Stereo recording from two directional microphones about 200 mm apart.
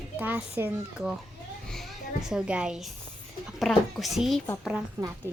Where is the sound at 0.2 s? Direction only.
10° right (ahead or behind).